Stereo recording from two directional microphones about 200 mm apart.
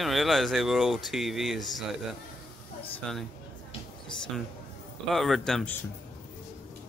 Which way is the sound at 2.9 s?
Centre (ahead or behind).